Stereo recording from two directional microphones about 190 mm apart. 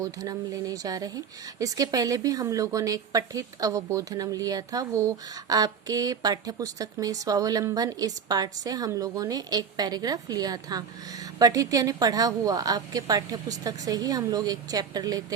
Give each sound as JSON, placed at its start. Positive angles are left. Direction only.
{"t": 0.0, "sound": "speech", "side_deg": -20}